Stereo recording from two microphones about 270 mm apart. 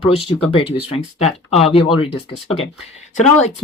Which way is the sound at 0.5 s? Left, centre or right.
Centre.